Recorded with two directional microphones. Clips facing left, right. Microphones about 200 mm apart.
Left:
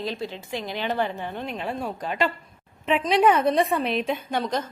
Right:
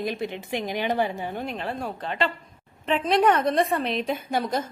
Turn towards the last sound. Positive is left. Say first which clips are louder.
# even
turn(degrees=-10)  # may be behind; listen again after turning